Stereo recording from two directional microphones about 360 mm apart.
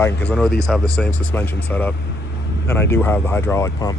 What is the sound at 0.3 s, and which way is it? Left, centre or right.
Speech, centre.